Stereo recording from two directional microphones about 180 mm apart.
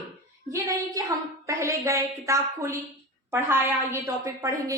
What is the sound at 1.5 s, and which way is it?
A woman's voice, 15° right (ahead or behind).